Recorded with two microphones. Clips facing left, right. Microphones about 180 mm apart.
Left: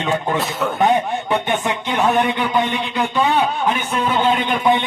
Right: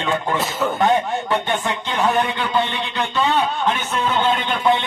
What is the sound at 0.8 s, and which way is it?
Speech, 15° left (ahead or behind).